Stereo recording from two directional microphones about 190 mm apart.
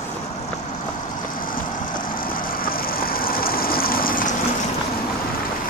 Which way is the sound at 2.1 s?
50° left (ahead or behind).